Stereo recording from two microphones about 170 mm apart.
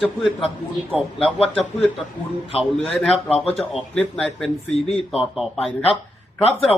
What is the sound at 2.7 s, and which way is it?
Speech, 5° left (ahead or behind).